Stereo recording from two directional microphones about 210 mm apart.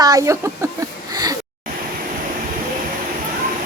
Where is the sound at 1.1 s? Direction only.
20° right (ahead or behind).